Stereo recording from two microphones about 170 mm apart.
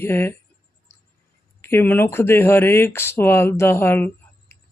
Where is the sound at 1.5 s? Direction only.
15° left (ahead or behind).